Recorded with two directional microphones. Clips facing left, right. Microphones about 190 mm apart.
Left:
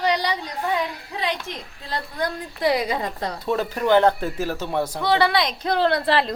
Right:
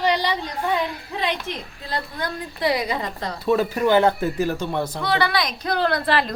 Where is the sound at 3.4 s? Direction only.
10° right (ahead or behind).